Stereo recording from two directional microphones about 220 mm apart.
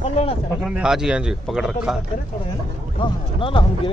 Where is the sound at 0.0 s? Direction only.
25° left (ahead or behind).